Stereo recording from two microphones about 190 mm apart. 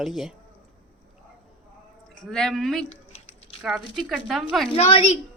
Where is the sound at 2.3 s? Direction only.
Centre (ahead or behind).